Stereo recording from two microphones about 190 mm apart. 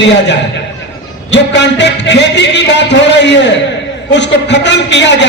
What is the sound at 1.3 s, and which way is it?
A man's voice, 65° left (ahead or behind).